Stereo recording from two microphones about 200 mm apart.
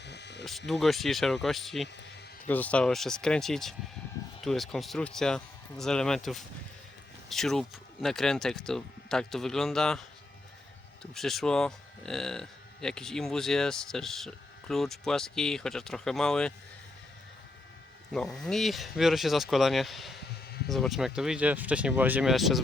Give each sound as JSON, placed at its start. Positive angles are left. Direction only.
{"t": 0.0, "sound": "a sound", "side_deg": 60}
{"t": 0.7, "sound": "speech", "side_deg": 0}
{"t": 18.1, "sound": "speech", "side_deg": 0}